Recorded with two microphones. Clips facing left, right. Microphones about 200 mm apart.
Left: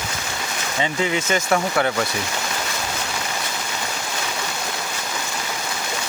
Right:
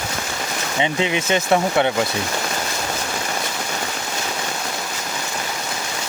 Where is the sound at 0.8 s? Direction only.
20° right (ahead or behind).